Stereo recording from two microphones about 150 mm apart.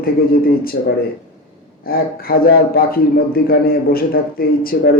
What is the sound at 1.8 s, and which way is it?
A man's voice, 80° left.